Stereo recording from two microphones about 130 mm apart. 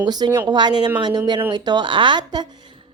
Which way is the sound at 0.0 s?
30° right (ahead or behind).